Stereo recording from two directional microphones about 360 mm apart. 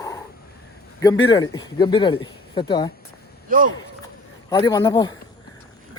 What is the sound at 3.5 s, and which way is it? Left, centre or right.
Speech, right.